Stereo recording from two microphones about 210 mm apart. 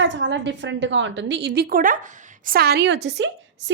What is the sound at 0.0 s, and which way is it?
A woman's voice, 60° right (ahead or behind).